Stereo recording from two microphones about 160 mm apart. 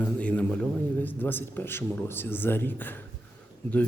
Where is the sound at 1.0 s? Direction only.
10° left (ahead or behind).